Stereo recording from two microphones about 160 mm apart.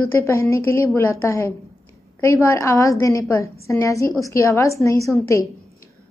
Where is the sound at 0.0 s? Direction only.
15° left (ahead or behind).